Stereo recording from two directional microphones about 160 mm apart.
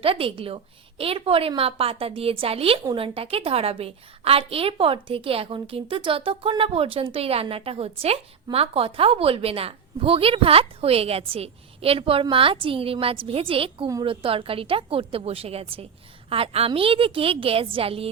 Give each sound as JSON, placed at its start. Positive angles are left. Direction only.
{"t": 0.0, "sound": "a woman's voice", "side_deg": -35}